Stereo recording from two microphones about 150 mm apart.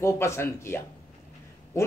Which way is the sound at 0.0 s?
20° left (ahead or behind).